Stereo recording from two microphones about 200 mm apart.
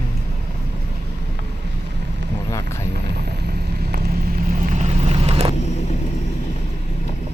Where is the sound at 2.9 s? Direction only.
55° right (ahead or behind); by 5.5 s 30° right (ahead or behind).